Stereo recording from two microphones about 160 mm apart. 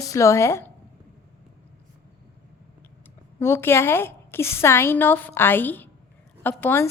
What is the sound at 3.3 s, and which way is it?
A woman's voice, 15° left (ahead or behind).